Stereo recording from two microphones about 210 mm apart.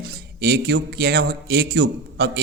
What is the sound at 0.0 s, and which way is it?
Speech, 50° right (ahead or behind).